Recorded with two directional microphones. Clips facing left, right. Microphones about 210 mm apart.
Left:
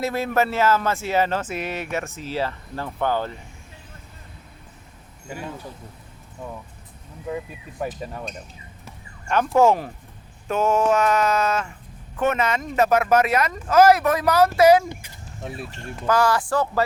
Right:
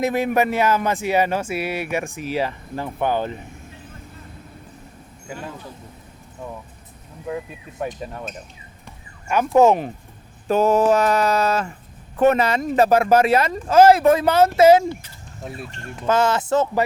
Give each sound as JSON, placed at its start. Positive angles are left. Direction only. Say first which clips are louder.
{"t": 0.0, "sound": "speech", "louder": "right 3 dB", "side_deg": -15}
{"t": 7.3, "sound": "speech", "louder": "right 1 dB", "side_deg": 0}
{"t": 10.5, "sound": "a sound", "louder": "right 3 dB", "side_deg": -35}
{"t": 12.1, "sound": "speech", "louder": "right 5 dB", "side_deg": -35}
{"t": 15.4, "sound": "speech", "louder": "even", "side_deg": 0}
{"t": 16.0, "sound": "speech", "louder": "right 1 dB", "side_deg": -25}